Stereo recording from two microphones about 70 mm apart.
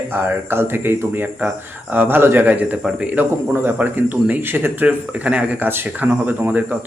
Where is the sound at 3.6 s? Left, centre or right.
Right.